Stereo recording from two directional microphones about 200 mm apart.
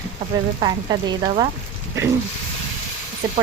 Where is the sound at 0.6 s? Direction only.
20° right (ahead or behind).